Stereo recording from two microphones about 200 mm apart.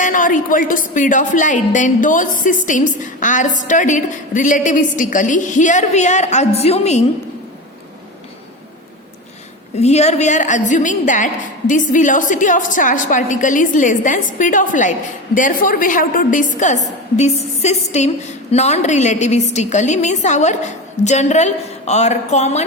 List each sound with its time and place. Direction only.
0.0 s a woman's voice: 40° left (ahead or behind)
9.7 s a woman's voice: 35° left (ahead or behind)